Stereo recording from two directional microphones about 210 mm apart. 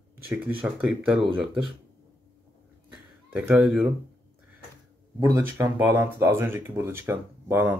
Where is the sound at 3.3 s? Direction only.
10° right (ahead or behind).